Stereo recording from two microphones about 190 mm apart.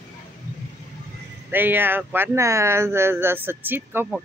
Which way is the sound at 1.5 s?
10° right (ahead or behind).